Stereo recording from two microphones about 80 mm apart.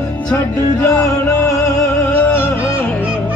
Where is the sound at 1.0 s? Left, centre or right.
Left.